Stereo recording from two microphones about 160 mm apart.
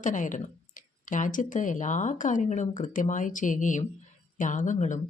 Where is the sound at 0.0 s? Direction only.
50° left (ahead or behind).